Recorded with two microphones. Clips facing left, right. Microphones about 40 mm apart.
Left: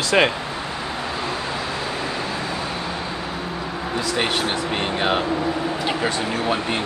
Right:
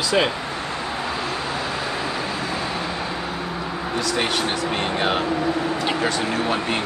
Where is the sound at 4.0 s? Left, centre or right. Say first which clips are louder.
Even; left.